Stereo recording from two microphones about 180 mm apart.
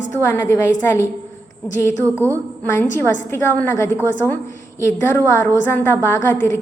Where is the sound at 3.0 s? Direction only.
15° left (ahead or behind).